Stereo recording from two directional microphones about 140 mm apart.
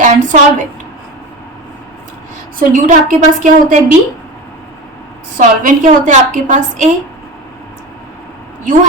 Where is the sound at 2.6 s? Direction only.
70° right (ahead or behind).